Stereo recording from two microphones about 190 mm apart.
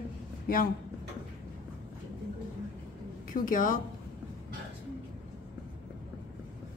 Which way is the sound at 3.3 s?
45° left (ahead or behind).